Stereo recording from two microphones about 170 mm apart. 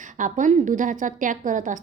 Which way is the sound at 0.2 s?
50° right (ahead or behind).